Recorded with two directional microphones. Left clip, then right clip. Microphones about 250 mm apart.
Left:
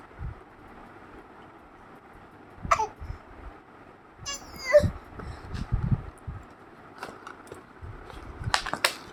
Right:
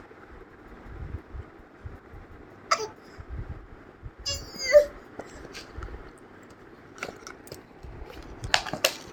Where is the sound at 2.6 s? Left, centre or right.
Centre.